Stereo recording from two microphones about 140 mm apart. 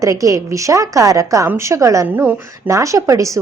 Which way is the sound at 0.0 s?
25° right (ahead or behind).